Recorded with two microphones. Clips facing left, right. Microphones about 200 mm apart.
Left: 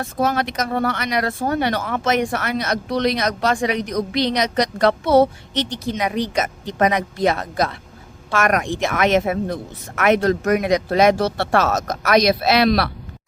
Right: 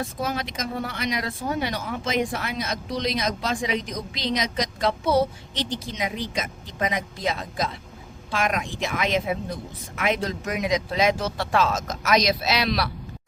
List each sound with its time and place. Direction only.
0.0 s speech: 70° left (ahead or behind)